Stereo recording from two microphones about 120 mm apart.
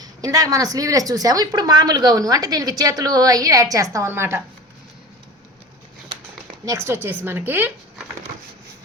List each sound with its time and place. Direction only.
0.0 s a woman's voice: 30° right (ahead or behind)
6.7 s speech: 20° right (ahead or behind)